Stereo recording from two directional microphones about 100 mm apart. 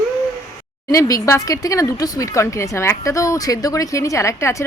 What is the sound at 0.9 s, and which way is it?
A woman's voice, 35° left (ahead or behind).